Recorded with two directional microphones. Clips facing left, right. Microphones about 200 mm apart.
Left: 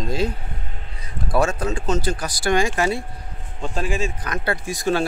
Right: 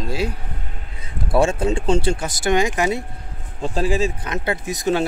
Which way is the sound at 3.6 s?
35° right (ahead or behind).